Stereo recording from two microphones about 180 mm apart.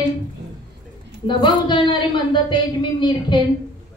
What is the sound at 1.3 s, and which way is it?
Speech, 25° left (ahead or behind).